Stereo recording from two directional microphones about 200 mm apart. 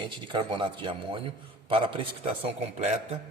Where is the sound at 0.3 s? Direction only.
25° right (ahead or behind).